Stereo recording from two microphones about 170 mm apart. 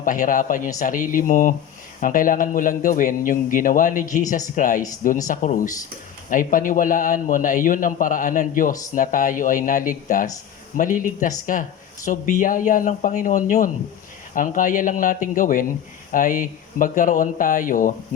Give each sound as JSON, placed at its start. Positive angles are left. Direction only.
{"t": 0.0, "sound": "a man's voice", "side_deg": 50}